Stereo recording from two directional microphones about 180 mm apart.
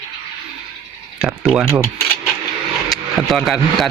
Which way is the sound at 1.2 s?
Centre (ahead or behind).